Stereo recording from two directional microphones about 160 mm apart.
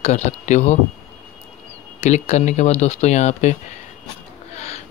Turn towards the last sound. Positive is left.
turn(degrees=45)  # may be behind; listen again after turning